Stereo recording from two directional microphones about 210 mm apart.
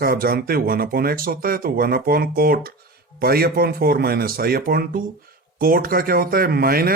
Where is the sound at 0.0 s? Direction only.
45° right (ahead or behind).